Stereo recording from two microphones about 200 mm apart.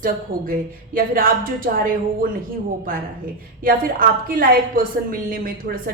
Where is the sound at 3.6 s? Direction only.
45° right (ahead or behind).